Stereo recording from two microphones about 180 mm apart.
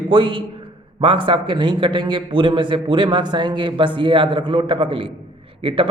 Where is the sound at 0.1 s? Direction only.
30° right (ahead or behind).